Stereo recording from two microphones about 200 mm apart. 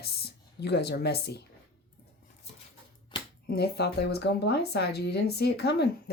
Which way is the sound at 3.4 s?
55° left (ahead or behind).